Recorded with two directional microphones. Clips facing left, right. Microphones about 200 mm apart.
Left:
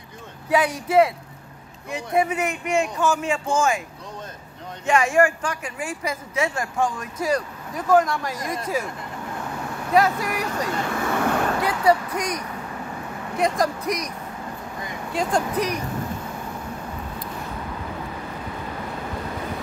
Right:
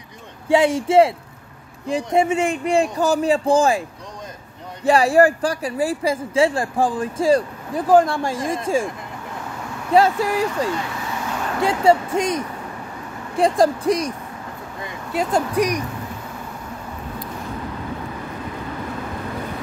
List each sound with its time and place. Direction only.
0.5 s speech: 25° right (ahead or behind)
4.8 s speech: 35° right (ahead or behind)
9.9 s speech: 30° right (ahead or behind)
11.1 s vehicle: 55° left (ahead or behind)
11.6 s speech: 25° right (ahead or behind)
15.3 s speech: 10° right (ahead or behind)